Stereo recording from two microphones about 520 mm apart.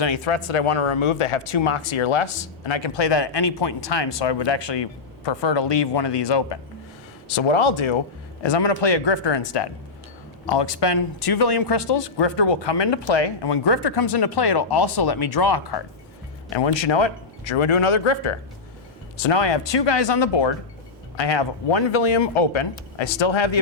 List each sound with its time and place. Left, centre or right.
0.0 s speech: left
7.3 s speech: left